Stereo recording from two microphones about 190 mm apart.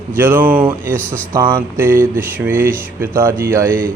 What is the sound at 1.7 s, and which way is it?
Speech, 10° right (ahead or behind).